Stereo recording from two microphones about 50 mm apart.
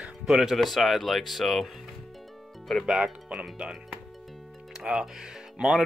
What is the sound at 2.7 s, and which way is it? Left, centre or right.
Speech, centre.